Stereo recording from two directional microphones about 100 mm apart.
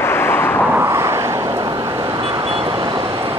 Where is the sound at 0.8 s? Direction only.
30° right (ahead or behind).